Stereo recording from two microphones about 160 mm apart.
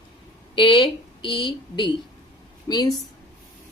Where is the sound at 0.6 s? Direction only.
30° left (ahead or behind).